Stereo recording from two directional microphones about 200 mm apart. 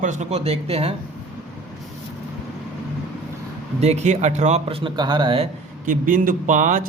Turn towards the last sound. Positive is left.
turn(degrees=-40)  # may be behind; listen again after turning